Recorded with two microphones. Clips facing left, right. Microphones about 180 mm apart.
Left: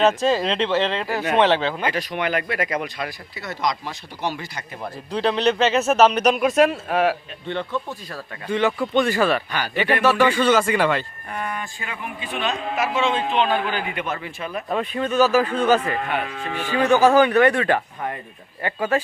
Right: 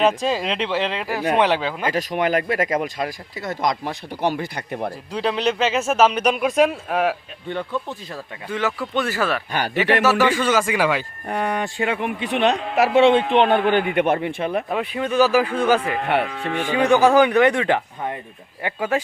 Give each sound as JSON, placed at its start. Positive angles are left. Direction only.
{"t": 0.2, "sound": "speech", "side_deg": -10}
{"t": 1.9, "sound": "speech", "side_deg": -40}
{"t": 5.1, "sound": "speech", "side_deg": -5}
{"t": 7.4, "sound": "speech", "side_deg": -10}
{"t": 8.4, "sound": "speech", "side_deg": -5}
{"t": 9.5, "sound": "speech", "side_deg": -50}
{"t": 10.0, "sound": "speech", "side_deg": -5}
{"t": 11.3, "sound": "a man's voice", "side_deg": -65}
{"t": 14.7, "sound": "speech", "side_deg": -10}
{"t": 16.0, "sound": "speech", "side_deg": -70}
{"t": 16.6, "sound": "speech", "side_deg": -15}